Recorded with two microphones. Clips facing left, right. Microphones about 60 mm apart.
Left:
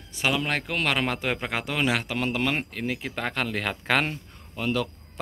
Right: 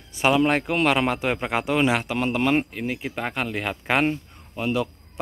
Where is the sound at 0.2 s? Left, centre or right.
Centre.